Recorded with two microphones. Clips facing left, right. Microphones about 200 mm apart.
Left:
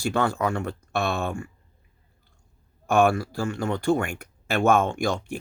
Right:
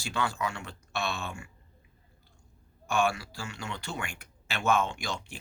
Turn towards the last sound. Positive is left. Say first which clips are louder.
# left 11 dB
turn(degrees=55)  # may be behind; listen again after turning